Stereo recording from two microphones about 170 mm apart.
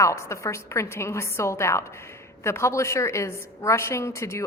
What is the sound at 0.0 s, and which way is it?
A woman's voice, 15° left (ahead or behind).